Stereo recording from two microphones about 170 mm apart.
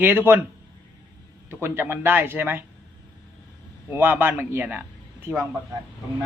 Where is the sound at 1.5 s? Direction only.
15° right (ahead or behind).